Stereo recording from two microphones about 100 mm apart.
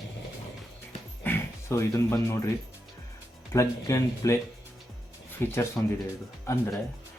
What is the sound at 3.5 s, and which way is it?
Speech, 30° left (ahead or behind).